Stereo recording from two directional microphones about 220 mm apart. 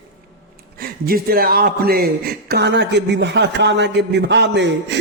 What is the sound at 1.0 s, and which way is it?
A man's voice, 45° right (ahead or behind).